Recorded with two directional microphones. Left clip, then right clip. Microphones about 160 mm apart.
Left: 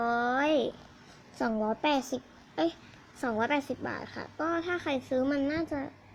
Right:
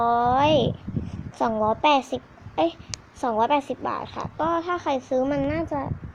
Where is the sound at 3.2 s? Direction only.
30° left (ahead or behind).